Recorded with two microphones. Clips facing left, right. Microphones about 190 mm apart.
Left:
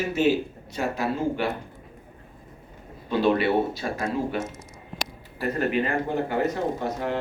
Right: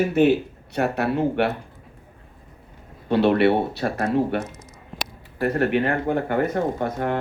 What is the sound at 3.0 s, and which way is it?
Speech, 70° right (ahead or behind).